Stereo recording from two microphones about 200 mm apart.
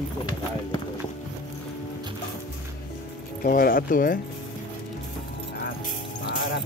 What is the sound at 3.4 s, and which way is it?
Speech, 45° left (ahead or behind).